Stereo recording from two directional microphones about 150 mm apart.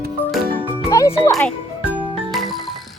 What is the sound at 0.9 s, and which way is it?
Music, 20° left (ahead or behind).